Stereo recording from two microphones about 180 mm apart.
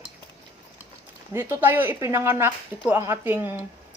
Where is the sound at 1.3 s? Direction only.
15° right (ahead or behind).